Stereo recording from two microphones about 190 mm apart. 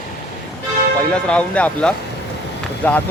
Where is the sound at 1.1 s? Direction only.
5° left (ahead or behind).